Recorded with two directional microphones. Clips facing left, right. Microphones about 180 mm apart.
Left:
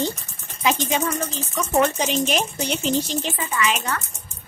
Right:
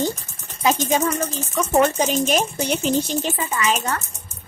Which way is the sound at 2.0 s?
45° right (ahead or behind).